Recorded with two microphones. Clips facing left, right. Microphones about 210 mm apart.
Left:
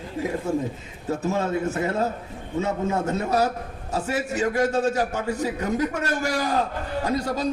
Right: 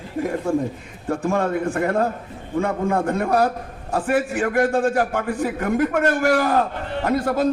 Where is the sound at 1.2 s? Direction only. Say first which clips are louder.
Right 4 dB; 55° right (ahead or behind).